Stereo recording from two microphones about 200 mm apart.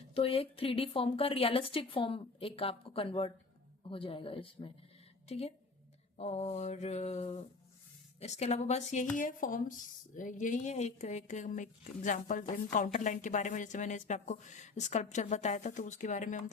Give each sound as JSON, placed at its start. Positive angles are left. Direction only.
{"t": 0.1, "sound": "a woman's voice", "side_deg": 30}